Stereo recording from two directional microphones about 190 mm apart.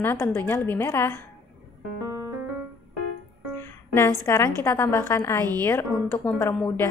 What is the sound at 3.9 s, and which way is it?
A woman's voice, 15° left (ahead or behind).